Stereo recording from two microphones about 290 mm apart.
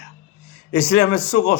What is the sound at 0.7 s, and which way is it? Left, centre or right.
Speech, left.